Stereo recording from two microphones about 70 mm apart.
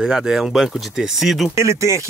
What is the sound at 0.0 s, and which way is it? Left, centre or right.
Speech, centre.